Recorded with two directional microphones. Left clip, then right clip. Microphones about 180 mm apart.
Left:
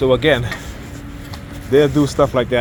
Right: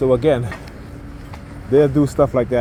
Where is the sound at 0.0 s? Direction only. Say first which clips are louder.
Left 1 dB; 55° right (ahead or behind).